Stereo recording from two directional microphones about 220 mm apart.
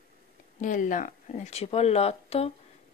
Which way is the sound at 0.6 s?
35° left (ahead or behind).